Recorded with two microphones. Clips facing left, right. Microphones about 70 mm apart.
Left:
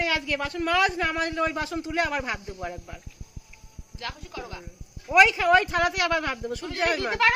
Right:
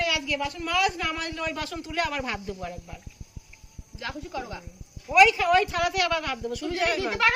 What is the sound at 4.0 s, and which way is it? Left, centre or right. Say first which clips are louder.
Goat: right 3 dB; centre.